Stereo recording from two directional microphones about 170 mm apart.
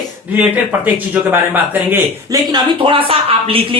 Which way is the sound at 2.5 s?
25° right (ahead or behind).